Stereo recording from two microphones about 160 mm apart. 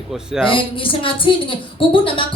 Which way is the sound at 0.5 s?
35° left (ahead or behind).